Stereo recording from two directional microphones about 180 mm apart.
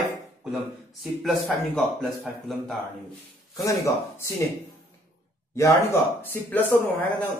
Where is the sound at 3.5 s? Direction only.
15° left (ahead or behind).